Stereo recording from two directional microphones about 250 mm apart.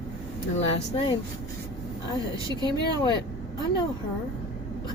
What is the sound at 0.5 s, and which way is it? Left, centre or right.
Speech, left.